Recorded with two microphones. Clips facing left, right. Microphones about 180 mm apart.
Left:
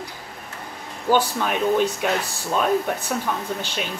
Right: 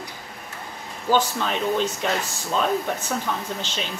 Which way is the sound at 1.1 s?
10° left (ahead or behind).